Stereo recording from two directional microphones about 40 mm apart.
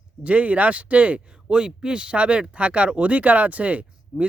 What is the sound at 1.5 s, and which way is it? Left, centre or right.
Speech, right.